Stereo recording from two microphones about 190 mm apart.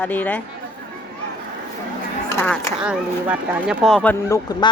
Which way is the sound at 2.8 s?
5° right (ahead or behind).